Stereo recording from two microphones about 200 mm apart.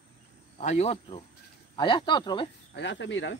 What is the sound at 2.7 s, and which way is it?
Speech, 65° left (ahead or behind).